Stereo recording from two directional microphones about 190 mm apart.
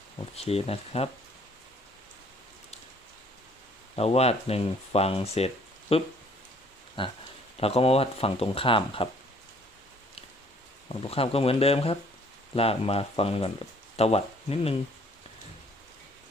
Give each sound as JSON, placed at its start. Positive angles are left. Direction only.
{"t": 0.3, "sound": "speech", "side_deg": 30}
{"t": 3.9, "sound": "speech", "side_deg": 30}
{"t": 10.8, "sound": "speech", "side_deg": 30}